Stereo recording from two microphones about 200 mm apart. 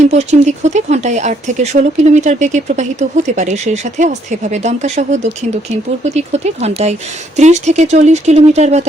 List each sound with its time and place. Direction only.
0.0 s speech: 35° right (ahead or behind)